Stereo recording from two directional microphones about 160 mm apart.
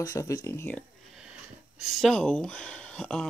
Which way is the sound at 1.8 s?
Centre (ahead or behind).